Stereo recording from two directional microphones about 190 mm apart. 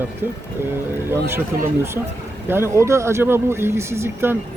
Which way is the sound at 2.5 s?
15° right (ahead or behind).